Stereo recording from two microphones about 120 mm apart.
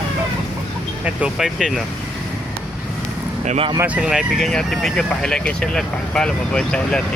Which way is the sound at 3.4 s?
60° right (ahead or behind).